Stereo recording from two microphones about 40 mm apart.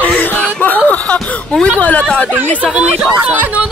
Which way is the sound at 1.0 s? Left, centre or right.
Left.